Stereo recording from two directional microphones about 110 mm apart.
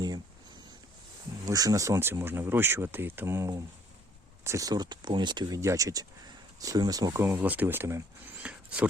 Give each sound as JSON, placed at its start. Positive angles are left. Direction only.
{"t": 1.5, "sound": "speech", "side_deg": -30}
{"t": 5.5, "sound": "speech", "side_deg": -30}
{"t": 7.2, "sound": "speech", "side_deg": -20}
{"t": 8.4, "sound": "a sound", "side_deg": -10}